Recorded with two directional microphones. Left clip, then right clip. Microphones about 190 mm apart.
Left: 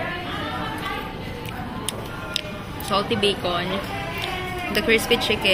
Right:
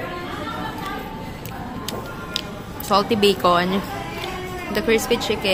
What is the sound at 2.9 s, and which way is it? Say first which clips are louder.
Speech: right 4 dB; 35° right (ahead or behind).